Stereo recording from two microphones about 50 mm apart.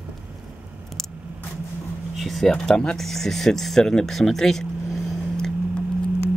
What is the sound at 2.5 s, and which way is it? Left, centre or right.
Speech, centre.